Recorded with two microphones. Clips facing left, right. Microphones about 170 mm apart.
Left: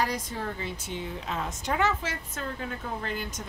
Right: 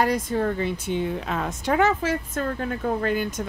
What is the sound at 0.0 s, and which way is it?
Speech, 55° right (ahead or behind).